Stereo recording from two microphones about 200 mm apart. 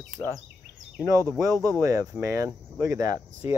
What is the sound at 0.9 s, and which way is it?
Speech, 15° right (ahead or behind).